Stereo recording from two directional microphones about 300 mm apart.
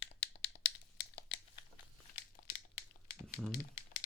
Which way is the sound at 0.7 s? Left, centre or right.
Left.